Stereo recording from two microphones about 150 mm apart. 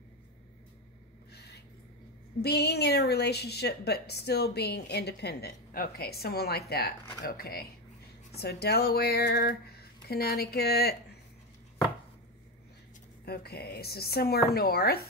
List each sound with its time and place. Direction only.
1.3 s a sound: 90° left
2.4 s a woman's voice: 90° left
13.2 s a woman's voice: 90° left